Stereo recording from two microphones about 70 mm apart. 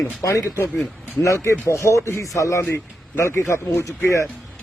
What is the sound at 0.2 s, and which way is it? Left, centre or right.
A man's voice, left.